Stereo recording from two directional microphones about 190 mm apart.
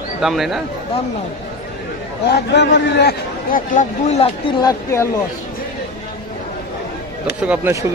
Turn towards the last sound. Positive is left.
turn(degrees=-10)  # may be behind; listen again after turning